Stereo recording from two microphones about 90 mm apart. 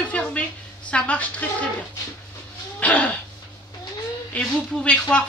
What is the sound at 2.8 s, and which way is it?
Speech, 15° left (ahead or behind).